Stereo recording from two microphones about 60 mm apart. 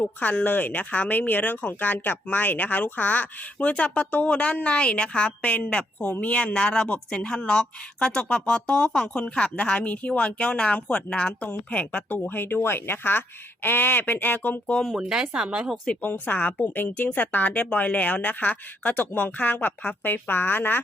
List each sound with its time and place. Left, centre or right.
0.0 s speech: left
14.8 s speech: centre
15.9 s speech: left